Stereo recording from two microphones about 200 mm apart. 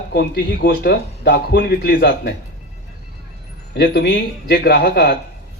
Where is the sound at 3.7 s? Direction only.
55° left (ahead or behind).